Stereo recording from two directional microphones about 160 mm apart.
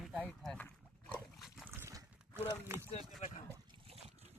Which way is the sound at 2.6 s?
15° right (ahead or behind).